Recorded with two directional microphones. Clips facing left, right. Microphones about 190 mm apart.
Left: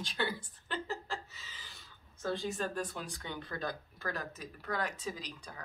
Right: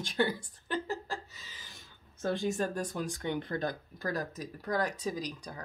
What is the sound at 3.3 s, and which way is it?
Speech, 20° right (ahead or behind).